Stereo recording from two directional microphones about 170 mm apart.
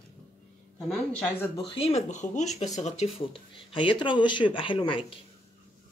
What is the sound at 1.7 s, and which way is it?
Speech, 35° left (ahead or behind).